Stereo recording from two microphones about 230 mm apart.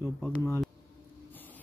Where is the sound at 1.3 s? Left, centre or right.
Centre.